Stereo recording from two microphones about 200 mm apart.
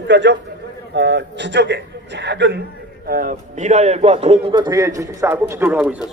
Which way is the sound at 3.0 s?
45° right (ahead or behind).